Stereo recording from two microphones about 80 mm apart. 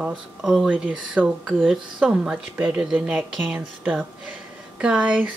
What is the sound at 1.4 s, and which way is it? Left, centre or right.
Speech, centre.